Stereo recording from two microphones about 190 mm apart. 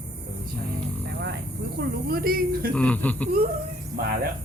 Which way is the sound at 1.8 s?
55° right (ahead or behind).